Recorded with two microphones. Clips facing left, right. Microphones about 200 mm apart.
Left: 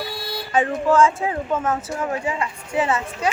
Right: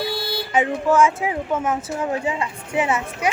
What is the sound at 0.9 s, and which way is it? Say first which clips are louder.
Speech: even; 10° right (ahead or behind).